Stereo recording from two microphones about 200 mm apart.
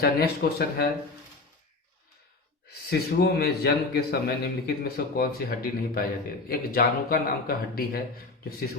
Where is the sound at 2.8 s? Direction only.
50° left (ahead or behind).